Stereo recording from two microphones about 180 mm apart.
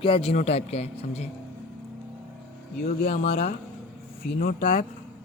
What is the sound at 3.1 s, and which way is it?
Speech, 40° left (ahead or behind).